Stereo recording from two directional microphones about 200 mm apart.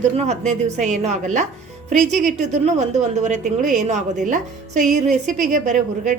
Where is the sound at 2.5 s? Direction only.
35° right (ahead or behind).